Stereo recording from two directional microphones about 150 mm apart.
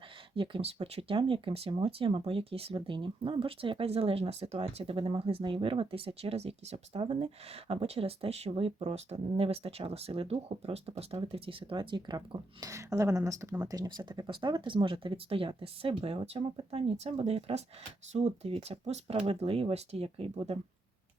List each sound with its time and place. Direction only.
0.3 s speech: 35° right (ahead or behind)